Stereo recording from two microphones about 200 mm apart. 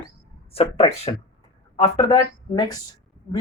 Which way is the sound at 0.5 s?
30° left (ahead or behind).